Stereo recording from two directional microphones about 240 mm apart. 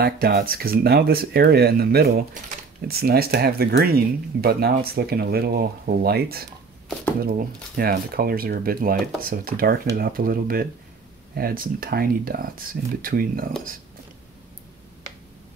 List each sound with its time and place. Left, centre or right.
0.0 s speech: right